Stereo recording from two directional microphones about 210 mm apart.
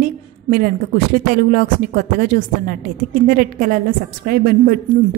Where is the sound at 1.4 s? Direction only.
45° right (ahead or behind).